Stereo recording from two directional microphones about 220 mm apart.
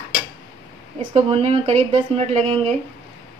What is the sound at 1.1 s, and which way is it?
Speech, 25° right (ahead or behind).